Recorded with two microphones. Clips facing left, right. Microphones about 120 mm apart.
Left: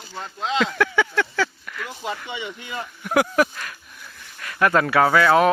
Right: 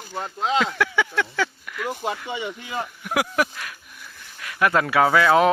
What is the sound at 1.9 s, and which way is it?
Speech, 45° right (ahead or behind).